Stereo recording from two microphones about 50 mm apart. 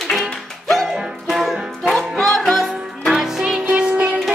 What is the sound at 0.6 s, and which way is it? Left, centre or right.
Music, centre.